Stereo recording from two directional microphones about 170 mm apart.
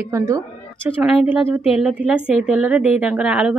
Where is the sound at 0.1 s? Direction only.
15° right (ahead or behind).